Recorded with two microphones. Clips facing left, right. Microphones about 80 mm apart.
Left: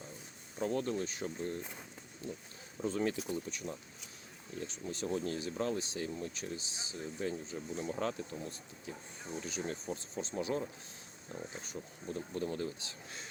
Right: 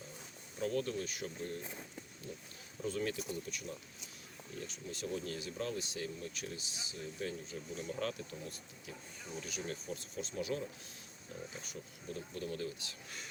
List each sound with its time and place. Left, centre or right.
0.6 s speech: left
2.8 s speech: left
4.6 s speech: left